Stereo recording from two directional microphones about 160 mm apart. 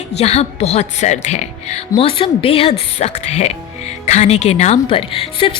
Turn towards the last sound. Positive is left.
turn(degrees=30)  # may be behind; listen again after turning